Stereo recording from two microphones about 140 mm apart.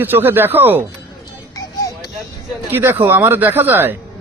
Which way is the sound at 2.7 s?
15° right (ahead or behind).